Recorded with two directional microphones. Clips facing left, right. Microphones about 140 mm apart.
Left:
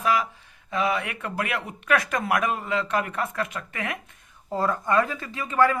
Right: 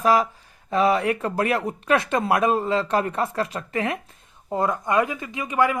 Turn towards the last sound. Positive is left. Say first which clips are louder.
# even
turn(degrees=-15)  # may be behind; listen again after turning